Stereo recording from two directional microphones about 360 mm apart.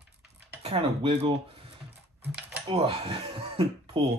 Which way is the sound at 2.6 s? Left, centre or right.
Centre.